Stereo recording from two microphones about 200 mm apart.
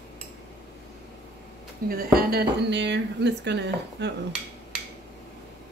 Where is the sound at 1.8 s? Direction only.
45° right (ahead or behind).